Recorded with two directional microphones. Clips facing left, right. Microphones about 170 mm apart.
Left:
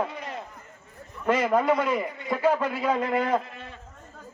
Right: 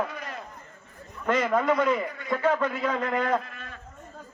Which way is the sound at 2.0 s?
20° left (ahead or behind).